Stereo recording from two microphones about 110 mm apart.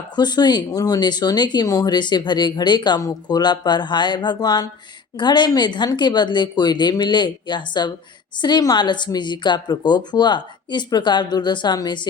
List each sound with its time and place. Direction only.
0.2 s speech: 40° left (ahead or behind)